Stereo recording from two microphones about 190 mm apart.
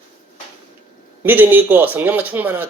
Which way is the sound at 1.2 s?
10° right (ahead or behind).